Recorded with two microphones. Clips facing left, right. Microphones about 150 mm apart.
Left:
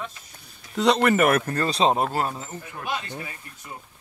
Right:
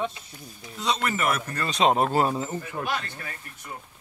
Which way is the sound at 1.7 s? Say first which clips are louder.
Even; 30° left (ahead or behind).